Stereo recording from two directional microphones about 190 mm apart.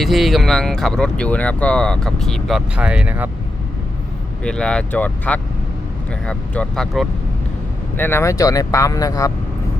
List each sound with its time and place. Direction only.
0.0 s speech: centre (ahead or behind)
4.4 s speech: 5° left (ahead or behind)